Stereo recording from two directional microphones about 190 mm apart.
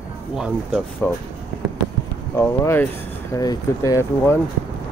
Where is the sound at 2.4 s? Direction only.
15° left (ahead or behind).